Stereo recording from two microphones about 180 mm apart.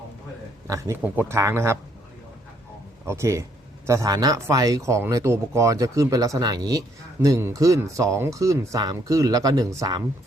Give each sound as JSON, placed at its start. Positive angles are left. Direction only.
{"t": 0.7, "sound": "speech", "side_deg": -15}
{"t": 3.1, "sound": "speech", "side_deg": -15}